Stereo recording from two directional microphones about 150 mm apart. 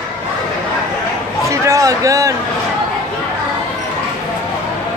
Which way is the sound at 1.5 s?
20° right (ahead or behind).